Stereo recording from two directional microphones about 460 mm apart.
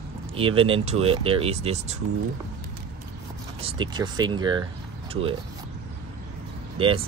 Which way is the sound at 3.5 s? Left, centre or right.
Centre.